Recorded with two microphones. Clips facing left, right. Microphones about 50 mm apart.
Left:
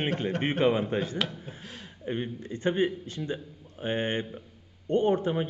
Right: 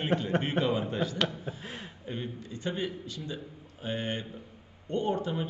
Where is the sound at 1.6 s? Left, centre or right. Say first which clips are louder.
Right 3 dB; right.